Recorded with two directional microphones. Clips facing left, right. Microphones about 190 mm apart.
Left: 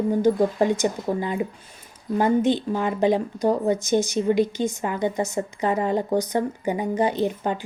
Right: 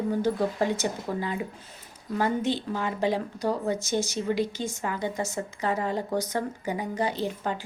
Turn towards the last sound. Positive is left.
turn(degrees=20)  # may be behind; listen again after turning